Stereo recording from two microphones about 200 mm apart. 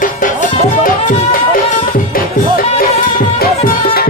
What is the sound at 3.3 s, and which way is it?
Music, 50° left (ahead or behind).